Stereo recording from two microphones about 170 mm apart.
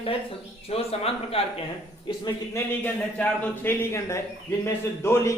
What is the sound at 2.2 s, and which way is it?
A man's voice, 15° left (ahead or behind).